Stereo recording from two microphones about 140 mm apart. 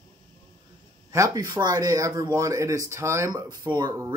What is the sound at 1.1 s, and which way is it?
Speech, 25° right (ahead or behind).